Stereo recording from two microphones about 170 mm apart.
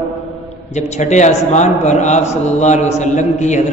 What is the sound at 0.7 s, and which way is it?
A man's voice, 40° left (ahead or behind).